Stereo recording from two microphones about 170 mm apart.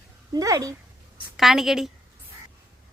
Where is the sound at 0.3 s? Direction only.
20° right (ahead or behind).